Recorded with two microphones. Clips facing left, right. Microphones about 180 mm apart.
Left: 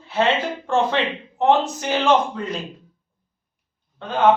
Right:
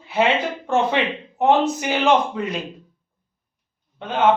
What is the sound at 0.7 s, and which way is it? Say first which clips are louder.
A man's voice: even; 15° right (ahead or behind).